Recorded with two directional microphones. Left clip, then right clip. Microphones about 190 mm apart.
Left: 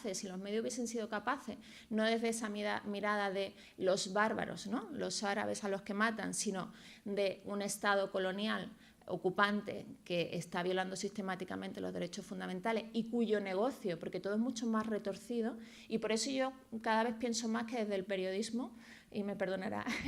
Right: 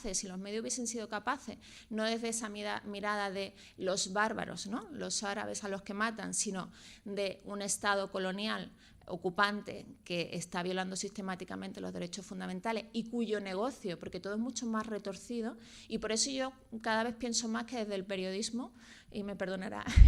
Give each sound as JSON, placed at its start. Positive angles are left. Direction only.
{"t": 0.0, "sound": "speech", "side_deg": -25}